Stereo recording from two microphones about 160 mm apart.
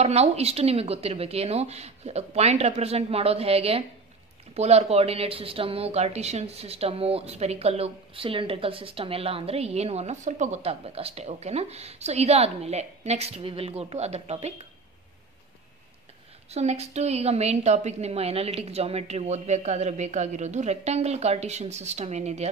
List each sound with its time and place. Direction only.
0.0 s a woman's voice: 40° right (ahead or behind)
16.4 s a woman's voice: 40° right (ahead or behind)